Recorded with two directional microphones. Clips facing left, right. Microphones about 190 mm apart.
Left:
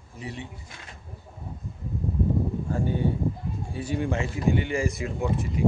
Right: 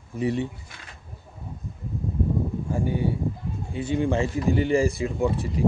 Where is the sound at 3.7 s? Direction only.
25° right (ahead or behind).